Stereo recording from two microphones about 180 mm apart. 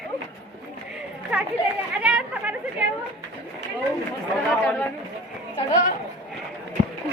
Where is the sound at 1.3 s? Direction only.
5° right (ahead or behind).